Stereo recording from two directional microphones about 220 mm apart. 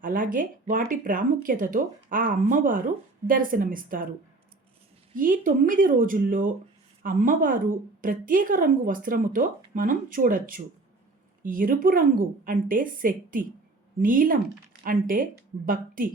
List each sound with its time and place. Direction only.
0.0 s speech: 40° right (ahead or behind)
5.1 s speech: 40° right (ahead or behind)